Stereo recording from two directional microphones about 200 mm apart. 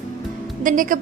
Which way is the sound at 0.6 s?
40° right (ahead or behind).